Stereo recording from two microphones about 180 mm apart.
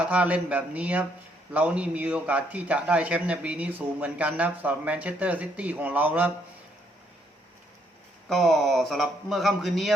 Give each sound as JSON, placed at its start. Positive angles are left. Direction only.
{"t": 0.0, "sound": "a man's voice", "side_deg": -10}
{"t": 8.3, "sound": "a man's voice", "side_deg": 0}